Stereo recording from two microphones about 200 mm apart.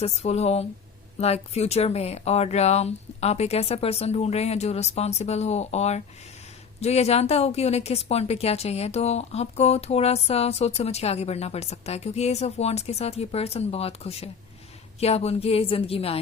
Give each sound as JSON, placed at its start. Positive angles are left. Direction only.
{"t": 0.0, "sound": "a woman's voice", "side_deg": 30}